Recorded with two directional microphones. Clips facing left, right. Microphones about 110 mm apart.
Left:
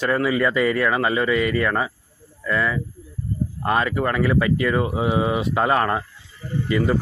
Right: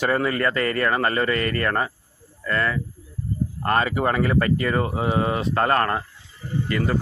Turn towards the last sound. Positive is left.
turn(degrees=15)  # may be behind; listen again after turning